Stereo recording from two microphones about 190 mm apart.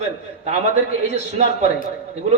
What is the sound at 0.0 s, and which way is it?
A man's voice, 35° right (ahead or behind).